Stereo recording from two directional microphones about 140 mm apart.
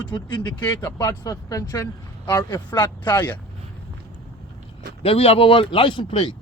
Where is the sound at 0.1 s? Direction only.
30° left (ahead or behind).